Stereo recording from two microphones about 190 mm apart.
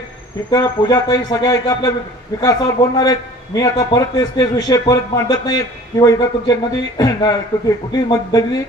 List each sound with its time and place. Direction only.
0.5 s a man's voice: 20° left (ahead or behind)